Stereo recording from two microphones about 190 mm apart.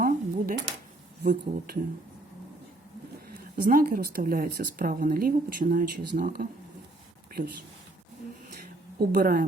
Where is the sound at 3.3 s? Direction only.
50° right (ahead or behind).